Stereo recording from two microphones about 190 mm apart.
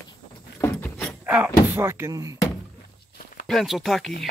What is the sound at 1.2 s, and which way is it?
Speech, 10° right (ahead or behind).